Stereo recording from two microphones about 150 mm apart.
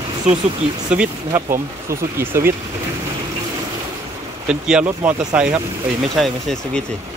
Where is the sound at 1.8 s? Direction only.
15° right (ahead or behind).